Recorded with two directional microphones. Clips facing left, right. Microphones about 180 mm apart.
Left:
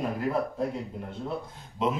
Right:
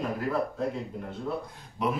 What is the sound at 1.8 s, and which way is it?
Speech, 20° left (ahead or behind).